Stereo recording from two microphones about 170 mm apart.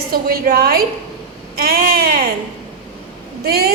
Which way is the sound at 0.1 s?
60° right (ahead or behind).